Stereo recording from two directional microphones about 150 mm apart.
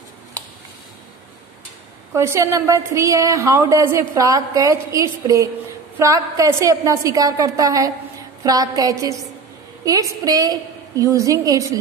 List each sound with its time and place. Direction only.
2.1 s a woman's voice: 20° right (ahead or behind)